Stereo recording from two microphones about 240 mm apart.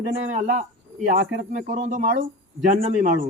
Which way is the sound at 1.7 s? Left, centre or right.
Right.